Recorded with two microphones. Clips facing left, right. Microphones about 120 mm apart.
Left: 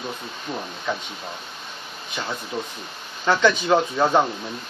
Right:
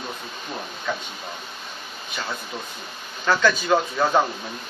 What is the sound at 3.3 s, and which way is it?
Speech, 20° left (ahead or behind).